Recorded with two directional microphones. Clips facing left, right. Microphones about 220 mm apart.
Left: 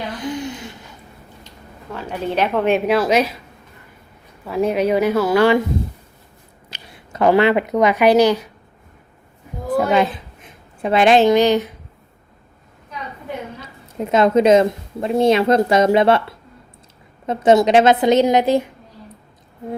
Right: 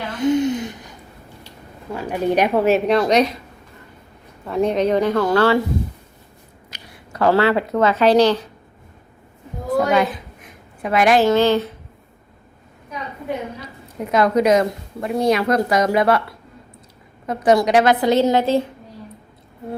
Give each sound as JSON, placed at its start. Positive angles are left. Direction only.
{"t": 0.1, "sound": "a sound", "side_deg": -25}
{"t": 1.9, "sound": "a woman's voice", "side_deg": -10}
{"t": 4.4, "sound": "a woman's voice", "side_deg": 5}
{"t": 6.7, "sound": "speech", "side_deg": 25}
{"t": 9.7, "sound": "a sound", "side_deg": 25}
{"t": 14.0, "sound": "a woman's voice", "side_deg": 25}
{"t": 17.2, "sound": "a woman's voice", "side_deg": 25}